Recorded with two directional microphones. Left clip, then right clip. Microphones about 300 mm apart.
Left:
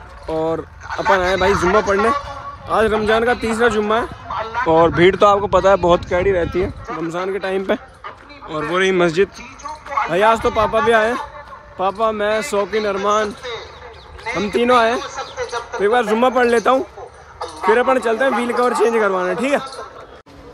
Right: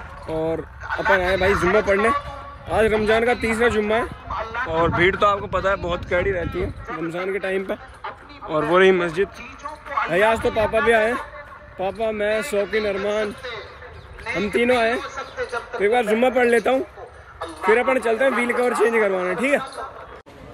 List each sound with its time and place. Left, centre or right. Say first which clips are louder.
0.3 s speech: left 4 dB; centre
2.9 s speech: left 3 dB; left
3.5 s speech: left 3 dB; centre
4.3 s a sound: left 4 dB; left
4.7 s speech: left 6 dB; centre
6.3 s speech: left 7 dB; left
8.0 s a sound: even; centre
9.0 s speech: left 7 dB; left
13.4 s a sound: left 4 dB; left
14.5 s speech: left 5 dB; centre
15.0 s speech: left 3 dB; left